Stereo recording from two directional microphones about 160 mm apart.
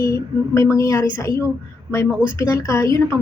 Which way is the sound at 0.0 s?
20° left (ahead or behind).